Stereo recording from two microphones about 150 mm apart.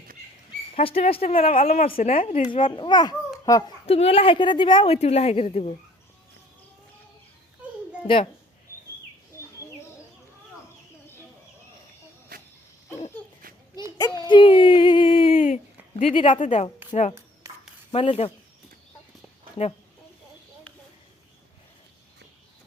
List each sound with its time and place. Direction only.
0.7 s a child's voice: 40° left (ahead or behind)
1.6 s a woman's voice: 60° left (ahead or behind)
2.0 s a woman's voice: 45° left (ahead or behind)
2.5 s a child's voice: 35° left (ahead or behind)
3.8 s a woman's voice: 40° left (ahead or behind)
8.0 s a child's voice: 35° left (ahead or behind)
12.3 s cricket: 75° right (ahead or behind)
13.5 s a sound: 70° right (ahead or behind)
14.0 s a sound: 30° left (ahead or behind)
15.4 s hoot: 60° left (ahead or behind)
16.0 s a child's voice: 35° left (ahead or behind)
16.4 s a woman's voice: 55° left (ahead or behind)
17.5 s a sound: 20° right (ahead or behind)
17.9 s a child's voice: 40° left (ahead or behind)